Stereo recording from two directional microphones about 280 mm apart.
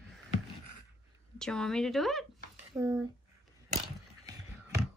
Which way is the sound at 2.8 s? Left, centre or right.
Centre.